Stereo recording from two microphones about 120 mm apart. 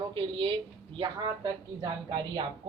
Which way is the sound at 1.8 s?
40° right (ahead or behind).